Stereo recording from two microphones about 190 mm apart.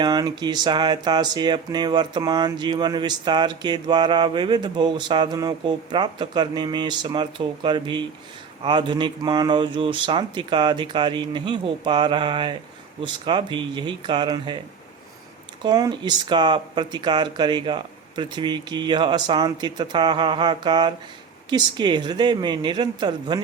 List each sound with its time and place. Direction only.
0.0 s speech: 20° right (ahead or behind)
15.6 s speech: 20° right (ahead or behind)